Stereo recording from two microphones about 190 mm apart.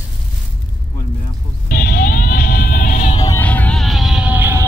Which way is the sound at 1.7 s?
50° left (ahead or behind).